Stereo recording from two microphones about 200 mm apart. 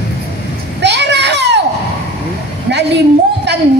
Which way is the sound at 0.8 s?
60° right (ahead or behind).